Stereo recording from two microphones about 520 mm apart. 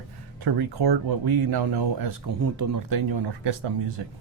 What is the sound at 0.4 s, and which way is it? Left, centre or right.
Speech, right.